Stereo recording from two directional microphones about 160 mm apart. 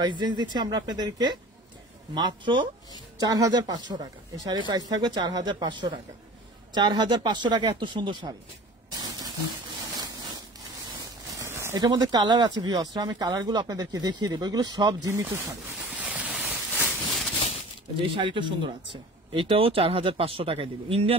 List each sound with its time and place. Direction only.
0.0 s speech: 30° right (ahead or behind)
11.3 s speech: 15° right (ahead or behind)
15.9 s a sound: 10° right (ahead or behind)
18.0 s speech: 30° right (ahead or behind)